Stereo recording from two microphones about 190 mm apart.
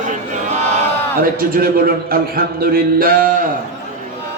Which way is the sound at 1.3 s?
50° right (ahead or behind).